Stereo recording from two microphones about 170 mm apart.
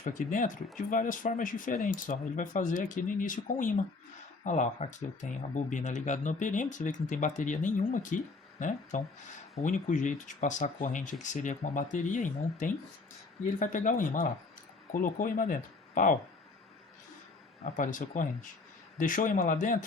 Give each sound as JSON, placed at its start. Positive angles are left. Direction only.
{"t": 0.0, "sound": "speech", "side_deg": 50}
{"t": 17.6, "sound": "speech", "side_deg": 50}